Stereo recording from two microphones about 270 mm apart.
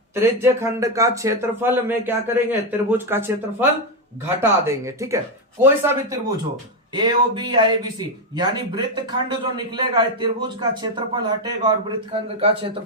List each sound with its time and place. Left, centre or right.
0.1 s speech: centre
4.4 s a man's voice: centre